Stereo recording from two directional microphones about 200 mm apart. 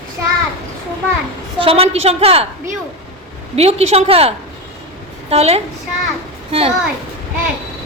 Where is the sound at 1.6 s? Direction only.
30° right (ahead or behind).